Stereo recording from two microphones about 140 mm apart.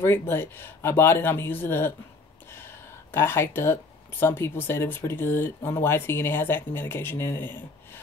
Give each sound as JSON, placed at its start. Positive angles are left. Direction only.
{"t": 0.0, "sound": "speech", "side_deg": 15}